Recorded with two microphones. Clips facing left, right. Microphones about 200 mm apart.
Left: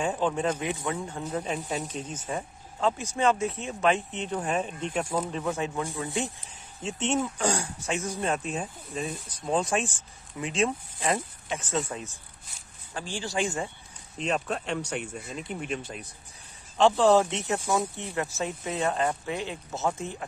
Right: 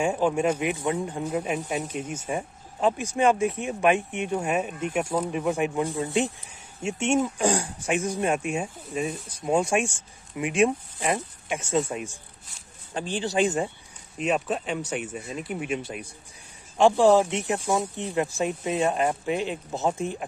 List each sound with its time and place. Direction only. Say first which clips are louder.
0.0 s speech: right 4 dB; 10° right (ahead or behind)
14.1 s speech: right 3 dB; 5° right (ahead or behind)